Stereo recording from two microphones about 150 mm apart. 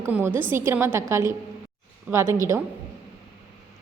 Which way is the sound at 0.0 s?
15° right (ahead or behind).